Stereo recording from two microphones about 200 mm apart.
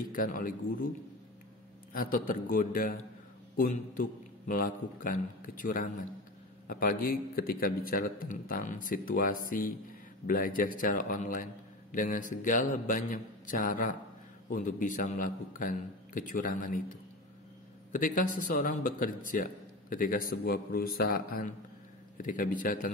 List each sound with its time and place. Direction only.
0.1 s a man's voice: 45° left (ahead or behind)